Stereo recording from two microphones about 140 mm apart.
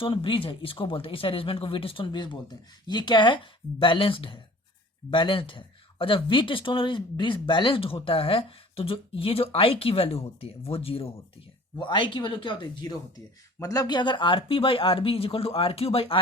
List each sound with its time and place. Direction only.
0.0 s speech: 40° left (ahead or behind)